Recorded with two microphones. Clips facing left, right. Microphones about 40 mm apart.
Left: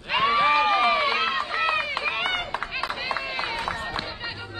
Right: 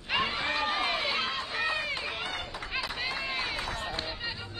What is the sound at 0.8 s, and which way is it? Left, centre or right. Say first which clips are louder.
Run: left 9 dB; centre.